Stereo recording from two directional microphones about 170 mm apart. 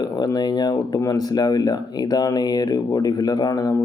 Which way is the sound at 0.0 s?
20° left (ahead or behind).